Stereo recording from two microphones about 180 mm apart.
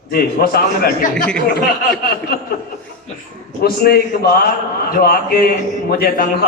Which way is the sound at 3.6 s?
60° left (ahead or behind).